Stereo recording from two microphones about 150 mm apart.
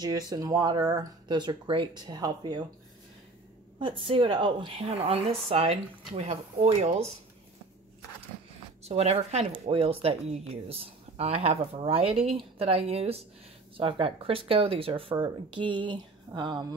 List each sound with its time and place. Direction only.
0.0 s speech: 25° right (ahead or behind)
3.8 s speech: 35° right (ahead or behind)
8.8 s speech: 45° right (ahead or behind); by 16.6 s 30° right (ahead or behind)